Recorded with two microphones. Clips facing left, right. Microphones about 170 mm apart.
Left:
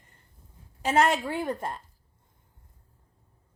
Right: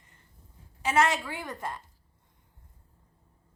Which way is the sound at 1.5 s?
30° left (ahead or behind).